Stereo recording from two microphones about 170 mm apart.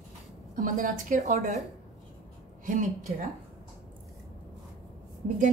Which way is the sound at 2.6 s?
45° right (ahead or behind).